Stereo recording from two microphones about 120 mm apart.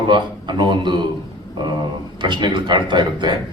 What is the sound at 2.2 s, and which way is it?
A man's voice, 40° right (ahead or behind).